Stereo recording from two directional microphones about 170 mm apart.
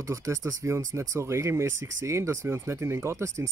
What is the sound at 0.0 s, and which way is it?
Speech, 20° right (ahead or behind).